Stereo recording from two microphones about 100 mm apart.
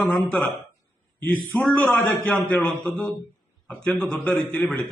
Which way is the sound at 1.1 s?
15° left (ahead or behind).